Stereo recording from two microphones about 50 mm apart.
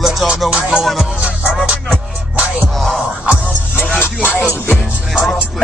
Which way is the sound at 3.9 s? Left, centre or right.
Left.